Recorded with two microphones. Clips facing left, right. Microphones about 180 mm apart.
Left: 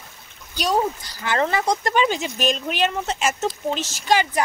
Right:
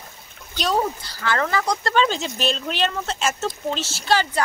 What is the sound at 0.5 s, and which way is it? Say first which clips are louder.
Speech: left 1 dB; 10° left (ahead or behind).